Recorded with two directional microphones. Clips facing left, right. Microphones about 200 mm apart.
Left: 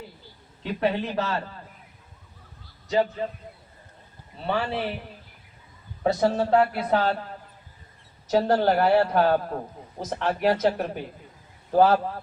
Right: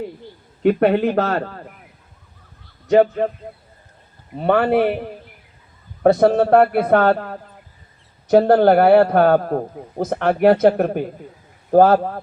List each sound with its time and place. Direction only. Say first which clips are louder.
0.6 s a man's voice: right 11 dB; 60° right (ahead or behind)
2.9 s a man's voice: right 10 dB; 60° right (ahead or behind)
4.4 s a man's voice: right 11 dB; 55° right (ahead or behind)
6.0 s a man's voice: right 9 dB; 55° right (ahead or behind)